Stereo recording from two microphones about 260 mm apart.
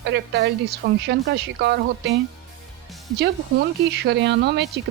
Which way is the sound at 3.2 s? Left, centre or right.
Right.